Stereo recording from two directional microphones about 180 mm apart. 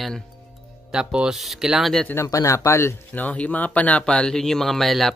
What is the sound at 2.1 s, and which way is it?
Speech, 20° left (ahead or behind).